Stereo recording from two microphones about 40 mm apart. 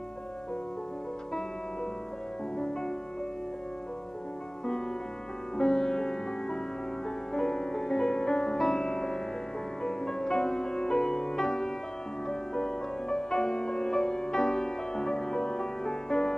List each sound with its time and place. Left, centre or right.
2.5 s music: centre
5.6 s music: centre